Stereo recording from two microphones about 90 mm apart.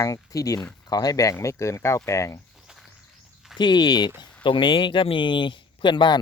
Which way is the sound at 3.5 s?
55° left (ahead or behind).